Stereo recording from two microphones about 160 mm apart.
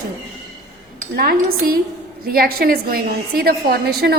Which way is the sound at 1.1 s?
70° right (ahead or behind).